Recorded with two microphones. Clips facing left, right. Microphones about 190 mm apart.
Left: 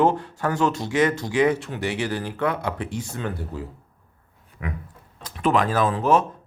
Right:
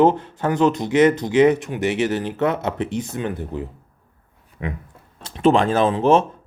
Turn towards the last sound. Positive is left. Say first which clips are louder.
# right 4 dB
turn(degrees=-25)  # may be behind; listen again after turning